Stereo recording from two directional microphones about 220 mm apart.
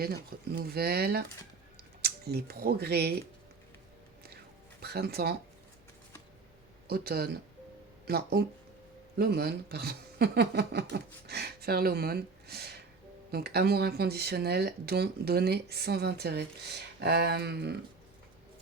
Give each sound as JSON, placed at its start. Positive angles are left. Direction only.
{"t": 0.0, "sound": "speech", "side_deg": -45}
{"t": 4.8, "sound": "speech", "side_deg": -45}
{"t": 6.8, "sound": "speech", "side_deg": -45}